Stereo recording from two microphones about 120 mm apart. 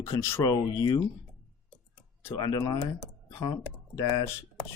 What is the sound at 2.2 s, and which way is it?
Speech, 30° left (ahead or behind).